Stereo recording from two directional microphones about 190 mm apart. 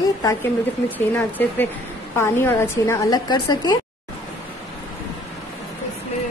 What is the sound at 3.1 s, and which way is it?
Speech, 20° left (ahead or behind).